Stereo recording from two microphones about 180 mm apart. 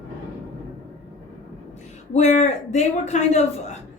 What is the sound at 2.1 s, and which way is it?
A woman's voice, 40° left (ahead or behind).